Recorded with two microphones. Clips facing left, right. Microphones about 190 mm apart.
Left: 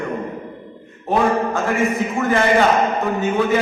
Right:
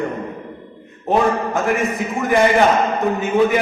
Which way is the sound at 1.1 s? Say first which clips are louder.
Right 1 dB; 20° right (ahead or behind).